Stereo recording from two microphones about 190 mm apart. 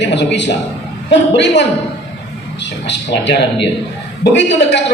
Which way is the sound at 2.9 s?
65° left (ahead or behind).